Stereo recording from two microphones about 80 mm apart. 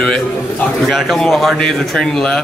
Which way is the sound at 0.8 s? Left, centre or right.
Centre.